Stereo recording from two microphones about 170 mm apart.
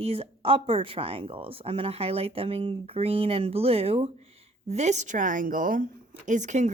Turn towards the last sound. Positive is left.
turn(degrees=-45)  # may be behind; listen again after turning